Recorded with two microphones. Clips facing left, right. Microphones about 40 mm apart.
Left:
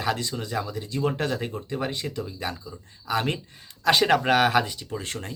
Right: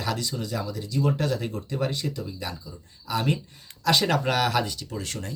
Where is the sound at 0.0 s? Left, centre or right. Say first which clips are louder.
Left 2 dB; left.